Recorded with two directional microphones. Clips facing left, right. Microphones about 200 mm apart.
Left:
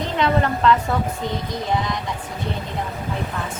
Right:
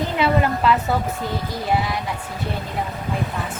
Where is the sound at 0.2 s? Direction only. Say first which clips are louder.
Even; 10° right (ahead or behind).